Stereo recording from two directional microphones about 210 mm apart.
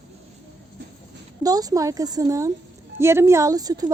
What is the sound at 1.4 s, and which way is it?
A woman's voice, 15° right (ahead or behind).